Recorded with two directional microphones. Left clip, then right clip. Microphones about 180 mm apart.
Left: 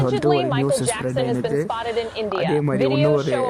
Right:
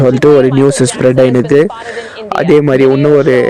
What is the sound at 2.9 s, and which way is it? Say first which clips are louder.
Speech: right 11 dB; centre (ahead or behind).